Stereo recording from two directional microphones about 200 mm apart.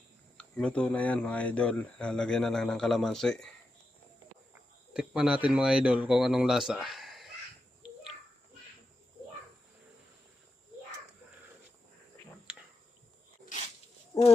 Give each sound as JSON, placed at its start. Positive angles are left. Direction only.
{"t": 0.3, "sound": "speech", "side_deg": 5}
{"t": 4.9, "sound": "speech", "side_deg": -5}
{"t": 14.1, "sound": "roaring cats", "side_deg": 15}